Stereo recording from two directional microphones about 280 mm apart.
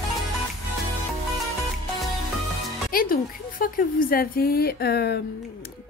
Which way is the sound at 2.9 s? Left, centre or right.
Left.